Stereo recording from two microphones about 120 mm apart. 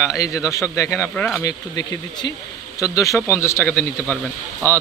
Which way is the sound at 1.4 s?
30° left (ahead or behind).